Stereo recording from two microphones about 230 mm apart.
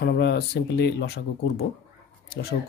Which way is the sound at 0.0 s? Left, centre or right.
Left.